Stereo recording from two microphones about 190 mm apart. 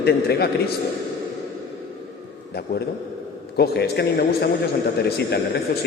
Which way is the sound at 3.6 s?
60° left (ahead or behind).